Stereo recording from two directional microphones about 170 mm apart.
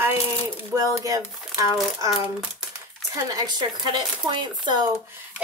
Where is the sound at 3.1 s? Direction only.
20° right (ahead or behind).